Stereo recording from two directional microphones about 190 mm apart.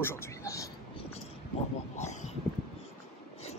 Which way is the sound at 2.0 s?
40° left (ahead or behind).